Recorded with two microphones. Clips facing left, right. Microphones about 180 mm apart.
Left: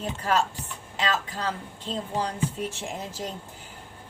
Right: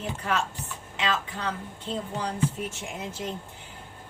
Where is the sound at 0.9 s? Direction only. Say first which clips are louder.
Left 1 dB; 35° left (ahead or behind).